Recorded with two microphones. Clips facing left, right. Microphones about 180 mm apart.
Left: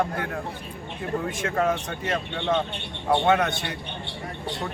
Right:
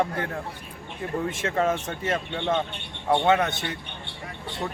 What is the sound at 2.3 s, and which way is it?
Speech, 15° right (ahead or behind).